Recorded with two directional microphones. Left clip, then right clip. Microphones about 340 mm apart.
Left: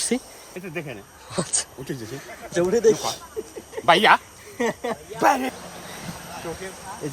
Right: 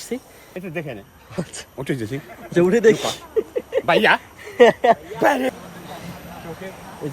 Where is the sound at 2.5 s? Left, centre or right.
Right.